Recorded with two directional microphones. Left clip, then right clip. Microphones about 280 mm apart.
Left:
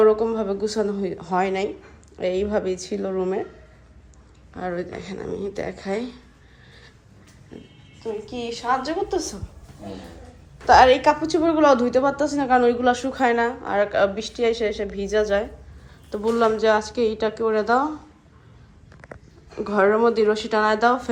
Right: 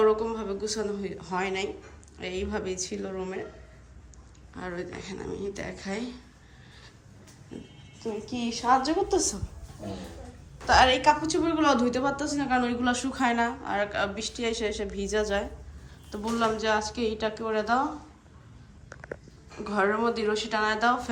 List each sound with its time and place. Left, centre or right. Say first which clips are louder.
0.0 s speech: left 6 dB; centre
4.5 s a woman's voice: left 7 dB; centre
8.3 s a woman's voice: even; right
9.0 s a woman's voice: even; right
10.7 s a woman's voice: left 6 dB; centre
19.6 s speech: left 8 dB; centre